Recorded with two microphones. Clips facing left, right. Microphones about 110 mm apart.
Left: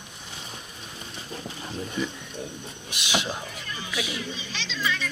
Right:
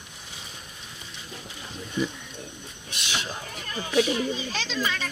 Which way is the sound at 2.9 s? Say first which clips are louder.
Even; 15° left (ahead or behind).